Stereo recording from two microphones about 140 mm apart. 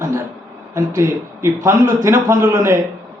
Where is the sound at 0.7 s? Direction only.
20° right (ahead or behind).